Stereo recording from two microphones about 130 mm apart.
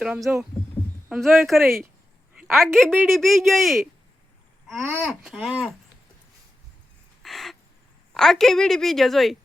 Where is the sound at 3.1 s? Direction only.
Centre (ahead or behind).